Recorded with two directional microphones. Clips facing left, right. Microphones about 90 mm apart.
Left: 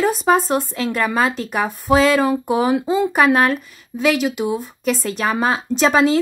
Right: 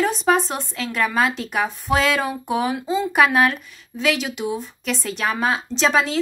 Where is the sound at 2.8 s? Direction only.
55° left (ahead or behind).